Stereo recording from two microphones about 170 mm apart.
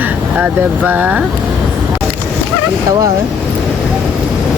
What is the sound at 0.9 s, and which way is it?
Speech, 10° right (ahead or behind).